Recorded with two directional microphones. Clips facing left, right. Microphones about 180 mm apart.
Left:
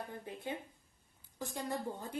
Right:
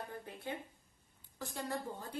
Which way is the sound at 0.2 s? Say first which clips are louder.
Left 2 dB; 20° left (ahead or behind).